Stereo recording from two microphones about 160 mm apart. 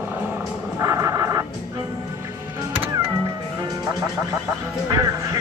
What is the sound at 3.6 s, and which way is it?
Music, 20° right (ahead or behind).